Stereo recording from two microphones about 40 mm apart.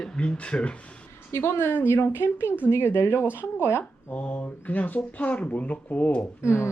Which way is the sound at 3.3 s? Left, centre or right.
Right.